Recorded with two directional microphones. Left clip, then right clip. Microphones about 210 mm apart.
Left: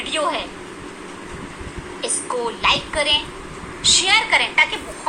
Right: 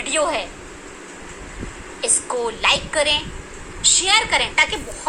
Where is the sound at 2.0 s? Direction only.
45° right (ahead or behind).